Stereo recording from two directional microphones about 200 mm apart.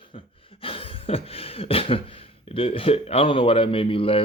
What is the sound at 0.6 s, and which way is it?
Beatboxing, 30° left (ahead or behind).